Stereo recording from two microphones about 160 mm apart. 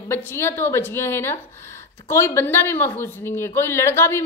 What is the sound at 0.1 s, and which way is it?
A woman's voice, 15° left (ahead or behind).